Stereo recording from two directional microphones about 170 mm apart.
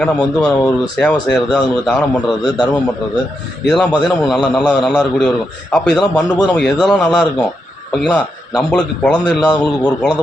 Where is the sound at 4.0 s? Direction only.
Centre (ahead or behind).